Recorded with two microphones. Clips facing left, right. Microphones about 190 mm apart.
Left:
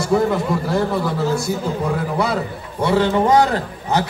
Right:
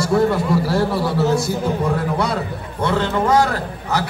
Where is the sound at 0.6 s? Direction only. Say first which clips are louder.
Even; 5° right (ahead or behind).